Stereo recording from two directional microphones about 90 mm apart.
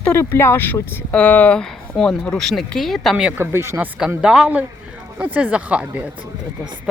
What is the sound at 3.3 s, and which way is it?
Speech, 25° right (ahead or behind).